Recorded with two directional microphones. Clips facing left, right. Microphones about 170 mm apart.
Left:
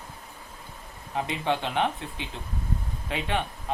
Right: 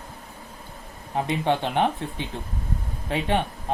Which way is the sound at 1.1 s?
35° right (ahead or behind).